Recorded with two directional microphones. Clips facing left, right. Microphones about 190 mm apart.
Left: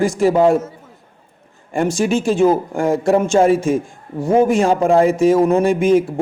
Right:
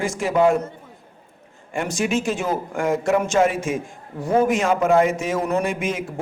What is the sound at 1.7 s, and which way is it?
A man's voice, 30° left (ahead or behind).